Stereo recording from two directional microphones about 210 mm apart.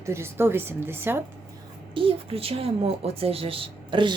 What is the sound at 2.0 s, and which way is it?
Speech, 25° right (ahead or behind).